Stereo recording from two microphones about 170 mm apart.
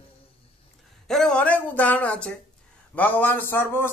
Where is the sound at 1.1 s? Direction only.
5° left (ahead or behind).